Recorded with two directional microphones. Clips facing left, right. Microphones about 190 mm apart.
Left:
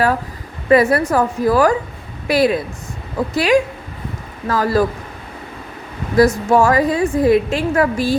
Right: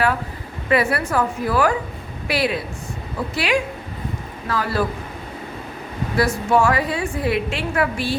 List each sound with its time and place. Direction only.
0.7 s a woman's voice: 40° left (ahead or behind)
6.1 s a woman's voice: 40° left (ahead or behind)